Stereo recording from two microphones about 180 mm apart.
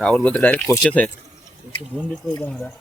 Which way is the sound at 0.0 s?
5° left (ahead or behind).